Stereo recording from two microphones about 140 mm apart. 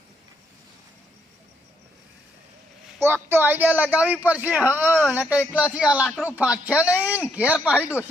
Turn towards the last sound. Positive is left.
turn(degrees=-10)  # may be behind; listen again after turning